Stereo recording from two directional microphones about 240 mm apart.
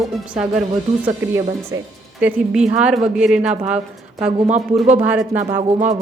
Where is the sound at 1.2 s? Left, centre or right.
Centre.